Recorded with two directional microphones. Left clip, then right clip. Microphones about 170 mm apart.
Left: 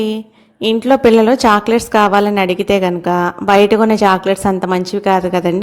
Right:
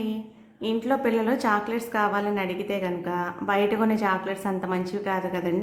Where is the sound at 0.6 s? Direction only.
45° left (ahead or behind).